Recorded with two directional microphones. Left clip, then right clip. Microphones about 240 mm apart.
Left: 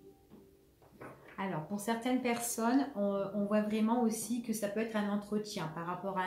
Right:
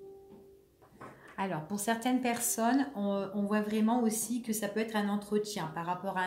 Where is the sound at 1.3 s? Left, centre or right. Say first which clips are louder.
Right 3 dB; right.